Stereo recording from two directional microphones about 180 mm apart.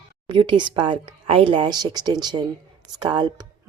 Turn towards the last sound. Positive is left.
turn(degrees=-25)  # may be behind; listen again after turning